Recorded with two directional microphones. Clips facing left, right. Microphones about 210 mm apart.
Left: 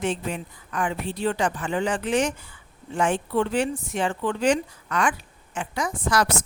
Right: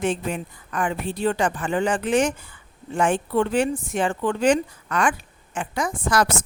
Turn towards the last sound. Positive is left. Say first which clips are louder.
# right 2 dB
turn(degrees=-50)  # may be behind; listen again after turning